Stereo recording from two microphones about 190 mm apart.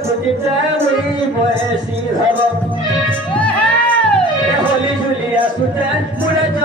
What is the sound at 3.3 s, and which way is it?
Music, 5° left (ahead or behind).